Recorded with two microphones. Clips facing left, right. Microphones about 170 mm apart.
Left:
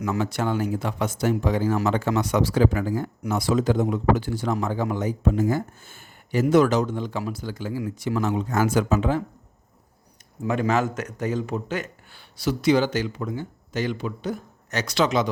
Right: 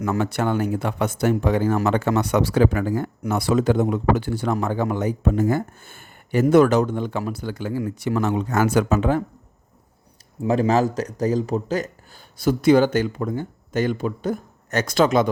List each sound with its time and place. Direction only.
0.0 s speech: 55° right (ahead or behind)
10.4 s speech: 35° right (ahead or behind); by 15.3 s 50° right (ahead or behind)